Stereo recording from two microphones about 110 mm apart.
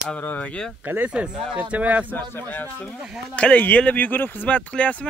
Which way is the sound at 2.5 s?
15° left (ahead or behind).